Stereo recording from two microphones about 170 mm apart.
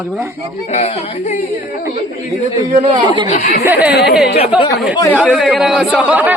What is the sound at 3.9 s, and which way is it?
Speech, 70° left (ahead or behind).